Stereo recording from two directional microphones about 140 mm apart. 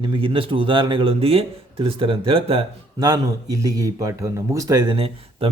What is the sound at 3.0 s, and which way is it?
Speech, 25° right (ahead or behind).